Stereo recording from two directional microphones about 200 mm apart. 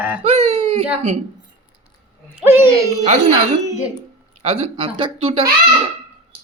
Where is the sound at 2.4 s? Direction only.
10° right (ahead or behind).